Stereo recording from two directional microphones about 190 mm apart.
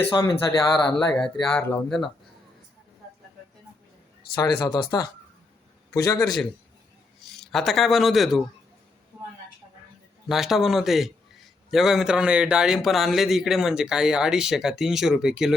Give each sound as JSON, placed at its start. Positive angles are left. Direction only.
{"t": 0.0, "sound": "speech", "side_deg": 20}
{"t": 0.7, "sound": "a man's voice", "side_deg": 5}
{"t": 4.6, "sound": "a man's voice", "side_deg": 20}
{"t": 7.5, "sound": "a man's voice", "side_deg": 0}
{"t": 10.2, "sound": "a man's voice", "side_deg": 0}